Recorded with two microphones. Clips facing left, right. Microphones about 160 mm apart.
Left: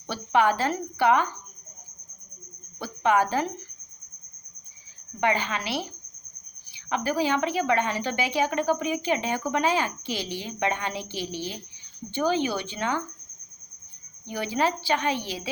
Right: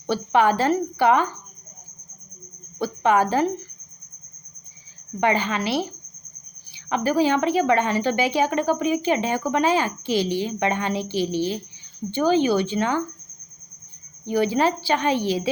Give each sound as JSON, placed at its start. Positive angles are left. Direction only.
{"t": 0.1, "sound": "a woman's voice", "side_deg": -35}
{"t": 2.8, "sound": "a woman's voice", "side_deg": -40}
{"t": 5.2, "sound": "a woman's voice", "side_deg": -35}
{"t": 14.3, "sound": "a woman's voice", "side_deg": -40}